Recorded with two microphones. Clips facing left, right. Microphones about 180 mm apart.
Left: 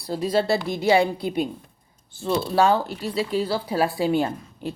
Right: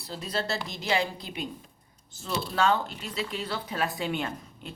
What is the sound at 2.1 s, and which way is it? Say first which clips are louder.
Speech: left 9 dB; 35° left (ahead or behind).